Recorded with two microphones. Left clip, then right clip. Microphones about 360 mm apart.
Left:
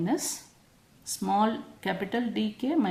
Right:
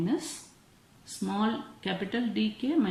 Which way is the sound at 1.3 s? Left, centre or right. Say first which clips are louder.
Left 6 dB; centre.